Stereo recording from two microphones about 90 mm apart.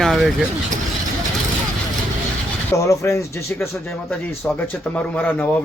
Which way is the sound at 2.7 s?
35° left (ahead or behind).